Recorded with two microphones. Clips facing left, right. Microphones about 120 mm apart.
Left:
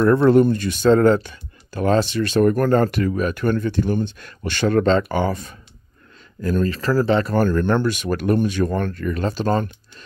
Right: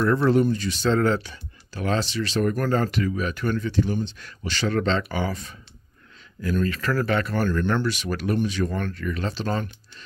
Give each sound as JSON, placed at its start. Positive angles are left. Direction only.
{"t": 0.0, "sound": "speech", "side_deg": 55}
{"t": 7.3, "sound": "speech", "side_deg": 45}